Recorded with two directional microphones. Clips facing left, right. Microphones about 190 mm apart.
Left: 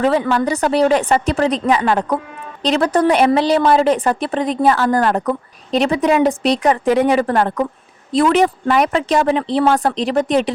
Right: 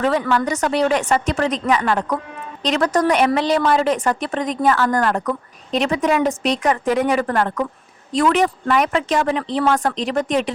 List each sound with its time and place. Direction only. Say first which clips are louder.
0.0 s a woman's voice: left 3 dB; 30° left (ahead or behind)